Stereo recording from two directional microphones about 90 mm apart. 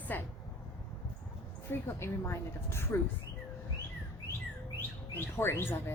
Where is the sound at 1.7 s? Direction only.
30° left (ahead or behind).